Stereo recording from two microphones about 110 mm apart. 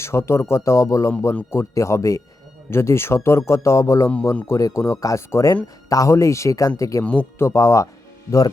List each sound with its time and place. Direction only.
0.0 s speech: 25° left (ahead or behind)
7.0 s speech: 15° left (ahead or behind); by 7.9 s 30° left (ahead or behind)